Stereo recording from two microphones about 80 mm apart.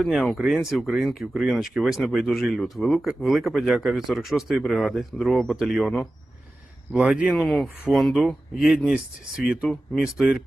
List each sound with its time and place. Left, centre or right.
0.0 s a man's voice: centre
6.9 s a man's voice: centre
7.3 s a man's voice: centre